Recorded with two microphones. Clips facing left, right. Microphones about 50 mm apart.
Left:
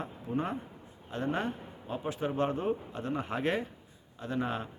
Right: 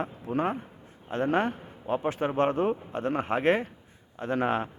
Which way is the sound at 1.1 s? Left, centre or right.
Right.